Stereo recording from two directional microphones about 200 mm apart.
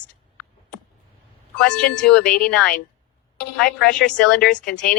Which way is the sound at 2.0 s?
5° left (ahead or behind).